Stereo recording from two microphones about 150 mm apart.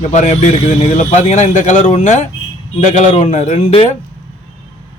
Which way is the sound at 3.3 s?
45° left (ahead or behind).